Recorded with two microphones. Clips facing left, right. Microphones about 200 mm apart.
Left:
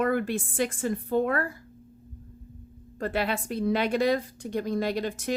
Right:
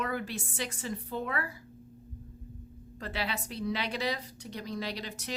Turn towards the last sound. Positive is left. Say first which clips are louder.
# left 10 dB
turn(degrees=50)  # may be behind; listen again after turning